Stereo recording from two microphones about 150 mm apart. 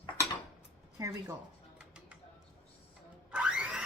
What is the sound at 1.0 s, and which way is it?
Speech, 20° right (ahead or behind).